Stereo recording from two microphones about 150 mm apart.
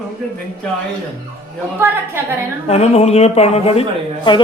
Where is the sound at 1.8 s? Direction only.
15° right (ahead or behind).